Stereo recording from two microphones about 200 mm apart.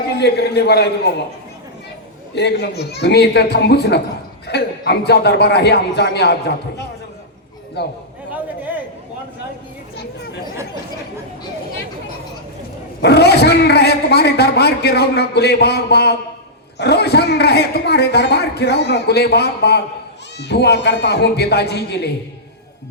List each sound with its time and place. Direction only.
0.2 s a man's voice: 55° left (ahead or behind)
2.3 s a man's voice: 55° left (ahead or behind)
7.8 s a man's voice: 55° left (ahead or behind)
8.3 s chatter: 10° right (ahead or behind)
13.0 s a man's voice: 55° left (ahead or behind)